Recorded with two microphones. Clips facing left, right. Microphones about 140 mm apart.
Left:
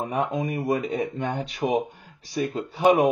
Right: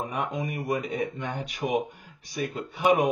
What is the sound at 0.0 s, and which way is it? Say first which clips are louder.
Speech: left 4 dB; 30° left (ahead or behind).